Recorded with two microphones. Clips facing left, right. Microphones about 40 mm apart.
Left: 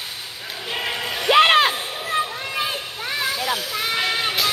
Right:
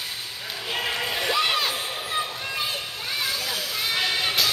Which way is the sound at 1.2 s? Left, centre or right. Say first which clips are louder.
Left 11 dB; left.